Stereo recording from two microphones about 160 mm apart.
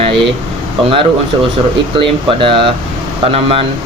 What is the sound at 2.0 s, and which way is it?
Speech, 35° right (ahead or behind).